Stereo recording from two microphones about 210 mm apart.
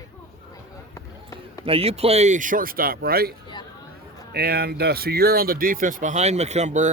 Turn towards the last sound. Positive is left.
turn(degrees=-35)  # may be behind; listen again after turning